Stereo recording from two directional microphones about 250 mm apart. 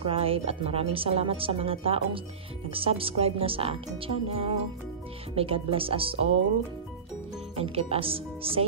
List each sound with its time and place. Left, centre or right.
0.0 s a woman's voice: right
7.5 s a woman's voice: right